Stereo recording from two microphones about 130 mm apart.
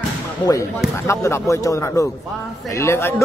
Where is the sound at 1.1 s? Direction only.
20° left (ahead or behind).